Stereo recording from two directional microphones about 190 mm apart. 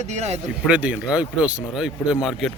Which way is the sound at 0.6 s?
5° right (ahead or behind).